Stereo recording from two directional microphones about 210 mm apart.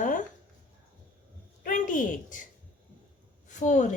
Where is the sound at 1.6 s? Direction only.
40° left (ahead or behind).